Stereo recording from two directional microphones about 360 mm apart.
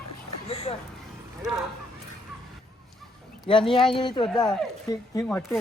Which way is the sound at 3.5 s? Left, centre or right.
Centre.